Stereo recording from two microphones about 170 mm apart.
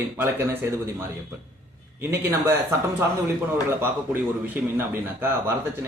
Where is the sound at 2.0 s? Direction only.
15° right (ahead or behind).